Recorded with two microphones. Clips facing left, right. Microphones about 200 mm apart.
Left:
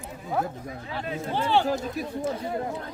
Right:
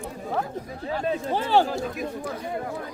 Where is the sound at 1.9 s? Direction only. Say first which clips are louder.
Left 2 dB; 25° left (ahead or behind).